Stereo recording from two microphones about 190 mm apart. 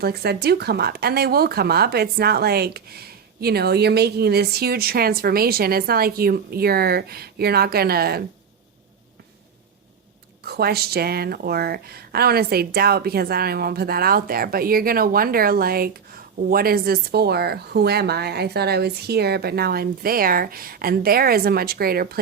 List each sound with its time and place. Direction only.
0.0 s speech: 55° right (ahead or behind)
10.4 s a woman's voice: 55° right (ahead or behind)